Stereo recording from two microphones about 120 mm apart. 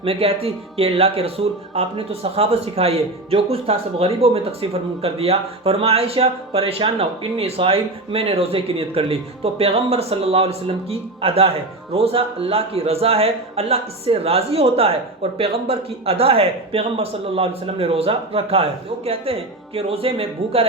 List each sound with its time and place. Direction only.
0.0 s a man's voice: 55° right (ahead or behind)